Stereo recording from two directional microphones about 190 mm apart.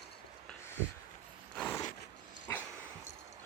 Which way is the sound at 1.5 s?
10° left (ahead or behind).